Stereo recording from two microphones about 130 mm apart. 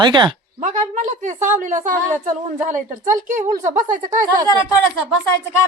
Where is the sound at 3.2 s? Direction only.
80° right.